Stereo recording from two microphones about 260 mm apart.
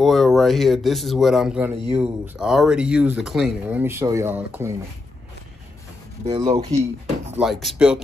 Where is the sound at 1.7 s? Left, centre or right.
Right.